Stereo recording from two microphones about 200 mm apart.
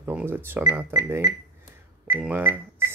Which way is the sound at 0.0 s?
10° right (ahead or behind).